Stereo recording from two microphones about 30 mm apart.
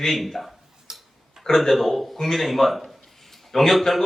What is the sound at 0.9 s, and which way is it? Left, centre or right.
Tick-tock, centre.